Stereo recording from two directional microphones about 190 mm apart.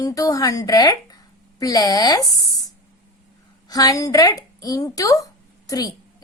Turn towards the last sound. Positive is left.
turn(degrees=20)  # may be behind; listen again after turning